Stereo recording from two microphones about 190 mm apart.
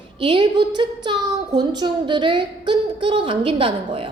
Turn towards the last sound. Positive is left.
turn(degrees=-30)  # may be behind; listen again after turning